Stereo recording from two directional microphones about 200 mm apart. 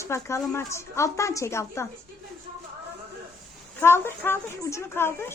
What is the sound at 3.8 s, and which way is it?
Speech, 10° left (ahead or behind).